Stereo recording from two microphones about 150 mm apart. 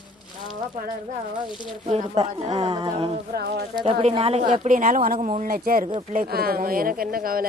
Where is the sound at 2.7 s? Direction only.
25° right (ahead or behind).